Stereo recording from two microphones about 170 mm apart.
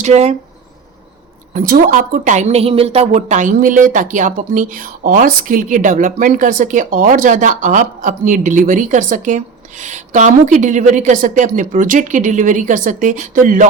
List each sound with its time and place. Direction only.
0.0 s speech: 40° right (ahead or behind)
1.5 s a woman's voice: 55° right (ahead or behind)